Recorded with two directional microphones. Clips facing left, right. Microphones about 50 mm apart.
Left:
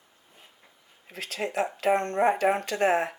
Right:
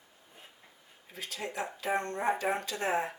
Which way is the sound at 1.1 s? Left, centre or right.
Left.